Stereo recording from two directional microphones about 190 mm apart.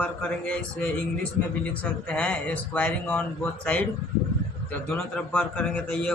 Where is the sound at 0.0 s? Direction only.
5° left (ahead or behind).